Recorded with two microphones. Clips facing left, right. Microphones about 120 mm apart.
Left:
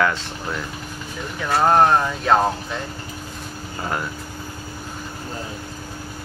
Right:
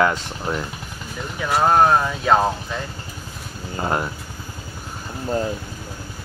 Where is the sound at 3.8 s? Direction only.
25° right (ahead or behind).